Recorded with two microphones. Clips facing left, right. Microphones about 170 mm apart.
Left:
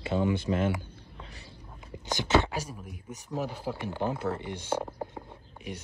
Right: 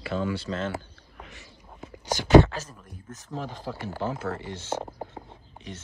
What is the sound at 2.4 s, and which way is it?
Speech, 10° left (ahead or behind).